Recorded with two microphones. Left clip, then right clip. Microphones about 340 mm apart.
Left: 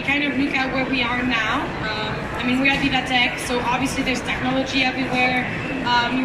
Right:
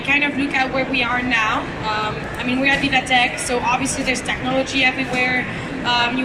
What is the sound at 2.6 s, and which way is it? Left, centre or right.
Speech, right.